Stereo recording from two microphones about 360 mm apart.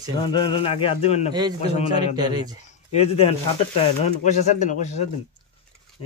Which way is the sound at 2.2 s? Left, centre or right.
Centre.